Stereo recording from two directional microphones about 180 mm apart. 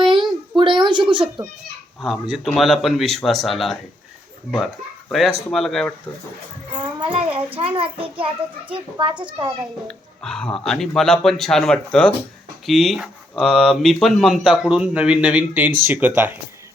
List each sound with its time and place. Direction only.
0.5 s a sound: 25° right (ahead or behind)
2.0 s speech: centre (ahead or behind)
7.1 s a child's voice: 30° right (ahead or behind)
9.8 s speech: 5° left (ahead or behind)